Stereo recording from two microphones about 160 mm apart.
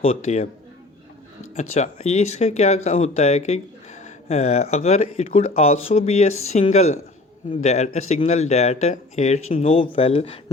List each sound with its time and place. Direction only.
0.0 s speech: 40° left (ahead or behind)
1.5 s speech: 45° left (ahead or behind)